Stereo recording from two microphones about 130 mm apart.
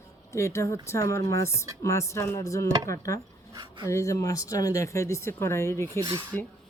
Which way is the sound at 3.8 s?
20° left (ahead or behind).